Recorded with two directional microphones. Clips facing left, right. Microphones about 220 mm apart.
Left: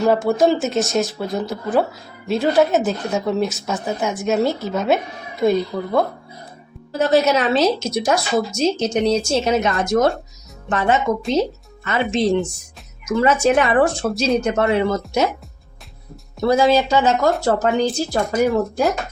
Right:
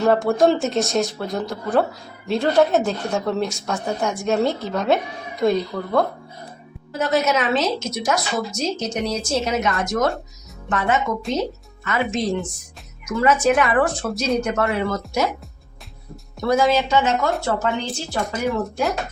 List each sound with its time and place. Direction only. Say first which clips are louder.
0.0 s speech: left 1 dB; 5° left (ahead or behind)
7.0 s a woman's voice: left 4 dB; 30° left (ahead or behind)
16.4 s a woman's voice: left 3 dB; 30° left (ahead or behind)